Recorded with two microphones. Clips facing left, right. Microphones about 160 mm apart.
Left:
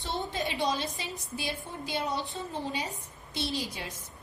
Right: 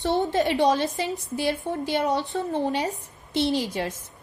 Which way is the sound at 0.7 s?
60° right (ahead or behind).